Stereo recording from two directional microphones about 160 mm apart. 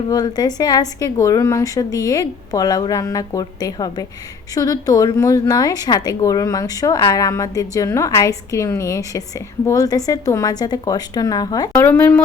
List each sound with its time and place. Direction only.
0.1 s a woman's voice: 25° left (ahead or behind)
11.9 s speech: 15° left (ahead or behind)